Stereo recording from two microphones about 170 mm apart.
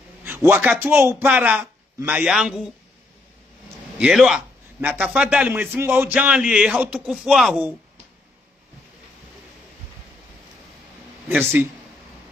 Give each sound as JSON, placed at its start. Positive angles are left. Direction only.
{"t": 0.2, "sound": "speech", "side_deg": -10}
{"t": 4.0, "sound": "a man's voice", "side_deg": 0}
{"t": 11.2, "sound": "speech", "side_deg": -15}